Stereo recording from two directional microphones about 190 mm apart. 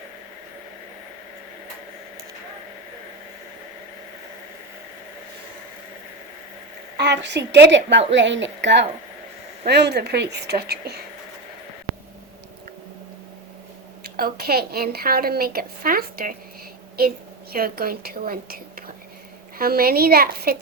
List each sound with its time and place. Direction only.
7.0 s a woman's voice: 65° right (ahead or behind)
14.0 s a woman's voice: 55° right (ahead or behind)